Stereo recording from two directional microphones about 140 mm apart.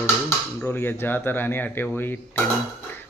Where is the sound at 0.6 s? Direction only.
15° left (ahead or behind).